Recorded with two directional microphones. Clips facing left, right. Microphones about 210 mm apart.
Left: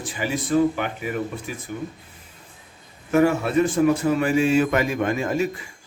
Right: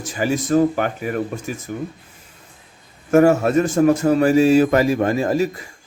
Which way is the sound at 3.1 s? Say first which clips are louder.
Right 5 dB; 45° right (ahead or behind).